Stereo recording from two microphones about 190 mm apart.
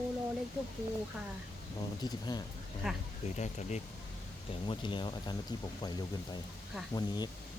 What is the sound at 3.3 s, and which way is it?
Speech, 40° left (ahead or behind).